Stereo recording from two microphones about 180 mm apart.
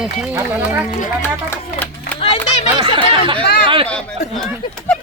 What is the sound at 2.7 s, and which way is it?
Snicker, 30° right (ahead or behind).